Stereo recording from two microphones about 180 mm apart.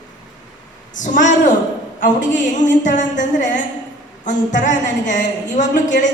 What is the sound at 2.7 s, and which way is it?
A woman's voice, 45° left (ahead or behind).